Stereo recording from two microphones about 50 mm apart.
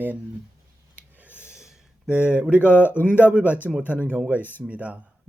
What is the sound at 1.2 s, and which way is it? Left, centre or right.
Snort, right.